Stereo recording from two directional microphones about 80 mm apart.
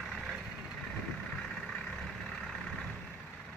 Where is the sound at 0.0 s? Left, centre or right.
Centre.